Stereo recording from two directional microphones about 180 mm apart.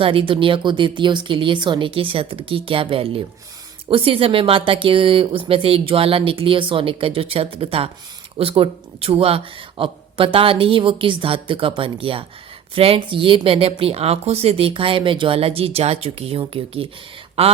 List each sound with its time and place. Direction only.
0.0 s speech: 30° right (ahead or behind)